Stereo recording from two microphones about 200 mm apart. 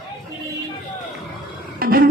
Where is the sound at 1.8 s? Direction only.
45° right (ahead or behind).